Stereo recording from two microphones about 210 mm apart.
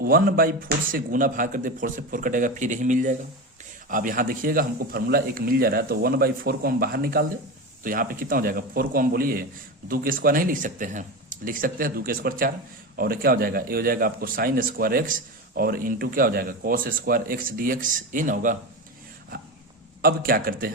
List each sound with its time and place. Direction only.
0.0 s a man's voice: 45° right (ahead or behind)
20.0 s speech: 45° right (ahead or behind)